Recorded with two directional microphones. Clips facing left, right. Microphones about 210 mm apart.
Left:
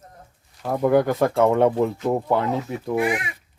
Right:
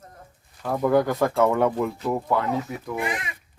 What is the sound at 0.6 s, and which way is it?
Speech, 15° left (ahead or behind).